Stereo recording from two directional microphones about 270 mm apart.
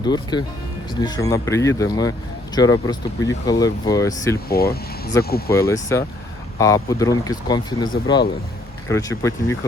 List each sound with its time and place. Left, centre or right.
0.0 s speech: centre
4.4 s speech: left
5.1 s speech: centre